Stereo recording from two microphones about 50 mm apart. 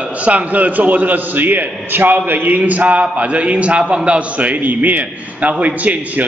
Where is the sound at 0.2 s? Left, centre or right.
Right.